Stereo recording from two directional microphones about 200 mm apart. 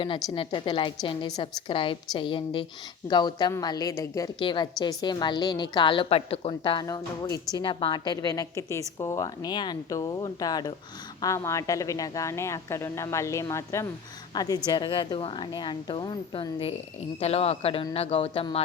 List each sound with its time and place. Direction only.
0.3 s a woman's voice: 25° left (ahead or behind)